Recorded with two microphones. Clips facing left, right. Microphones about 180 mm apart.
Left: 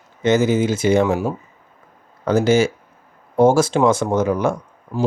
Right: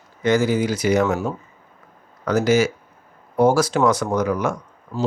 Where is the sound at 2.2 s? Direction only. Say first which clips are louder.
Left 2 dB; 30° left (ahead or behind).